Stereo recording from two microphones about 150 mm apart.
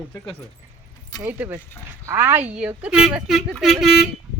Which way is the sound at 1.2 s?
15° right (ahead or behind).